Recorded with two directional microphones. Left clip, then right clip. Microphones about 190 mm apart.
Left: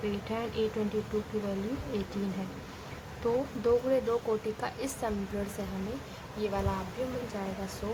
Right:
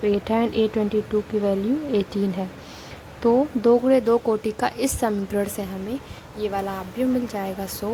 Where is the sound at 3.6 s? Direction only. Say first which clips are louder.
Right 8 dB; 40° right (ahead or behind).